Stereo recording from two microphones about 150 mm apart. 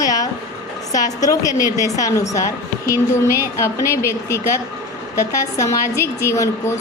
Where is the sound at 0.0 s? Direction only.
25° left (ahead or behind).